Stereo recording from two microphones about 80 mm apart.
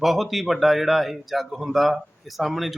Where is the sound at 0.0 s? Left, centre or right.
Centre.